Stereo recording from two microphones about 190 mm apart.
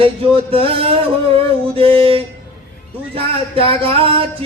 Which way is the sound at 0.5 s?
30° right (ahead or behind).